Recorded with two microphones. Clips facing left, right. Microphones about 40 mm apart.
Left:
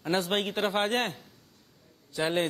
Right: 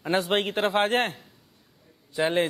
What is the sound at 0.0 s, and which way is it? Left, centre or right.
Speech, centre.